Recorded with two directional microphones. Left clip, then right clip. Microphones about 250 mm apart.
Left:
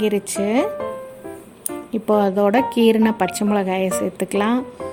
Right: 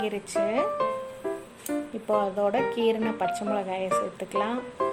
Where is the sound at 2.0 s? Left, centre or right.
Left.